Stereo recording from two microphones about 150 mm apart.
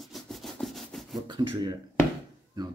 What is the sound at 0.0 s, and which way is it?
Rub, centre (ahead or behind).